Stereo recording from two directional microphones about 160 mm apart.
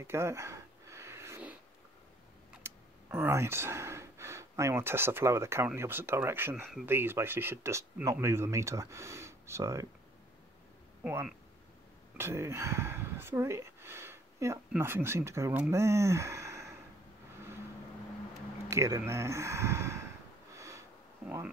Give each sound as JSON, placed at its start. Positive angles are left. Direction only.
{"t": 0.0, "sound": "sniff", "side_deg": -15}
{"t": 2.6, "sound": "speech", "side_deg": -10}
{"t": 12.2, "sound": "speech", "side_deg": -15}
{"t": 18.7, "sound": "speech", "side_deg": -15}
{"t": 20.5, "sound": "sniff", "side_deg": -20}